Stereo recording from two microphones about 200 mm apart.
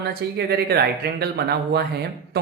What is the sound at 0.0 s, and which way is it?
A woman's voice, 55° right (ahead or behind).